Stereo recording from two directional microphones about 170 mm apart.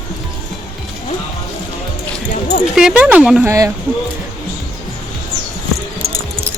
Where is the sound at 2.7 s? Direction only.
5° right (ahead or behind).